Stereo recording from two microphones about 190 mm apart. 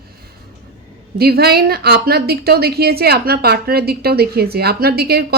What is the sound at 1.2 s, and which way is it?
A woman's voice, 55° right (ahead or behind).